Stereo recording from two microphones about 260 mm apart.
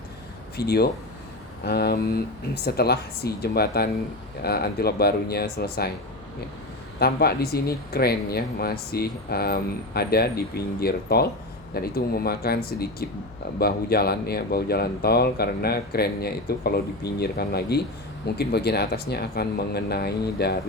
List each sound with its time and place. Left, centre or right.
0.5 s speech: left
7.0 s speech: left